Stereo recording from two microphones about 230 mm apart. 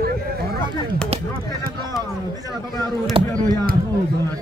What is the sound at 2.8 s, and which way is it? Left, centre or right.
Speech, centre.